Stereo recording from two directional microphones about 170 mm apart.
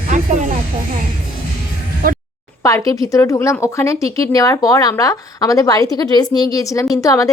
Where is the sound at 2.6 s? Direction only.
20° left (ahead or behind).